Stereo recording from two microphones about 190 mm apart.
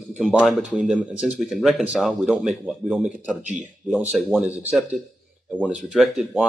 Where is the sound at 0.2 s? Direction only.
Centre (ahead or behind).